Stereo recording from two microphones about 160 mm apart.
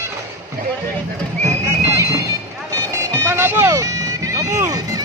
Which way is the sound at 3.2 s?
15° right (ahead or behind).